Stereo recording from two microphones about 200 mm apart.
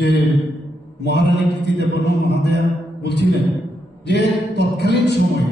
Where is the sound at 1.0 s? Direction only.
60° left (ahead or behind).